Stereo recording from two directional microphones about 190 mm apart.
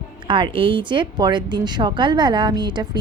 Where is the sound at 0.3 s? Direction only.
25° right (ahead or behind).